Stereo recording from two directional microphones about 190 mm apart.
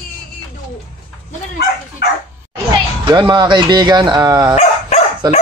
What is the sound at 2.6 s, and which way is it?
Speech, 25° right (ahead or behind).